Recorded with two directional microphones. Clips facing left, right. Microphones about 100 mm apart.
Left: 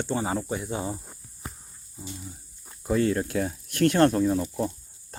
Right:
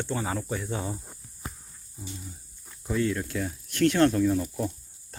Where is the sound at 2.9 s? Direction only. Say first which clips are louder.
Left 4 dB; 40° left (ahead or behind).